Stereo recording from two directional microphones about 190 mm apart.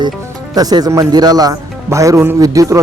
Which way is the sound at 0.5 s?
20° right (ahead or behind).